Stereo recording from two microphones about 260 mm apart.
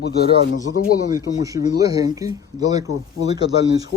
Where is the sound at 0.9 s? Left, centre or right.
Left.